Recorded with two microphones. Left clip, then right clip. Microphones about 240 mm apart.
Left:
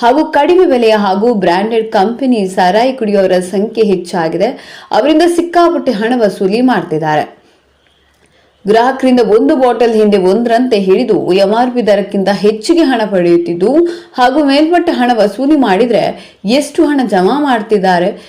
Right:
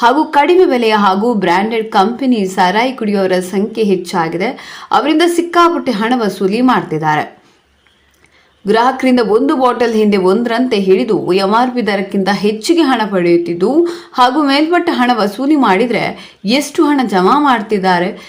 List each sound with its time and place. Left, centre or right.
0.2 s a woman's voice: centre
8.6 s a woman's voice: centre
15.1 s speech: right
15.4 s a woman's voice: centre